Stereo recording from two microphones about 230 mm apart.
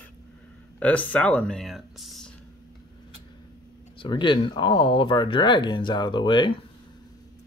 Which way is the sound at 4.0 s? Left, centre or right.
Left.